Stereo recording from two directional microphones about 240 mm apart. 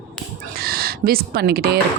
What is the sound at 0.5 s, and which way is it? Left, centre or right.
Speech, right.